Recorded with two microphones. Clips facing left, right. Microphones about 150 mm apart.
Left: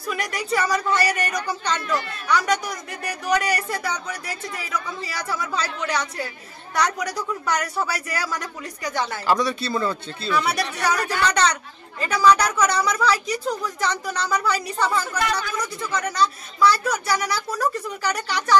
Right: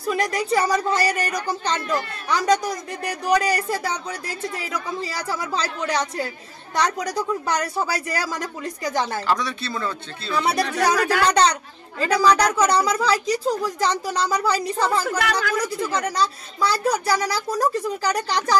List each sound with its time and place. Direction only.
0.1 s a woman's voice: 30° right (ahead or behind)
2.2 s a woman's voice: 30° right (ahead or behind)
5.1 s a woman's voice: 30° right (ahead or behind)
7.4 s a woman's voice: 30° right (ahead or behind)
9.3 s speech: 5° left (ahead or behind)
10.3 s speech: 30° right (ahead or behind)
11.0 s speech: 90° right
11.2 s a woman's voice: 35° right (ahead or behind)
15.0 s speech: 85° right
15.9 s a woman's voice: 35° right (ahead or behind)